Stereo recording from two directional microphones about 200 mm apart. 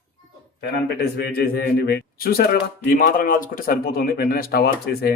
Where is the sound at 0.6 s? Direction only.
55° left (ahead or behind).